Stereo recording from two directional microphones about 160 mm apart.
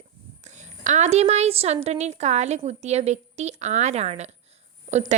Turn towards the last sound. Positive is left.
turn(degrees=-45)  # may be behind; listen again after turning